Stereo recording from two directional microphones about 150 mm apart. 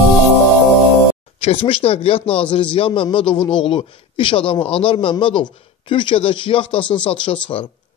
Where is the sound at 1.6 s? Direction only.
40° left (ahead or behind).